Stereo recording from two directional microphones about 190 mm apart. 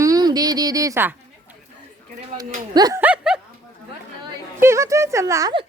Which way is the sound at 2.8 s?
20° right (ahead or behind).